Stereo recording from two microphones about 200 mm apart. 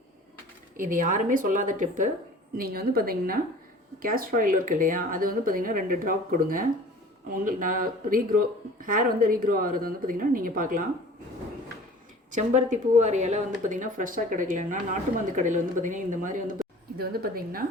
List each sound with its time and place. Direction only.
0.8 s speech: 40° right (ahead or behind)
12.3 s speech: 35° right (ahead or behind)